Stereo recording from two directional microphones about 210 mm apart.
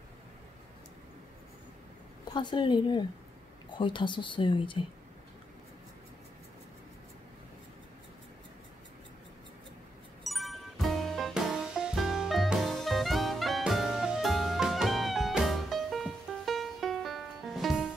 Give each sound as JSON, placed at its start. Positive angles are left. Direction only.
{"t": 2.3, "sound": "speech", "side_deg": 20}
{"t": 10.2, "sound": "music", "side_deg": 0}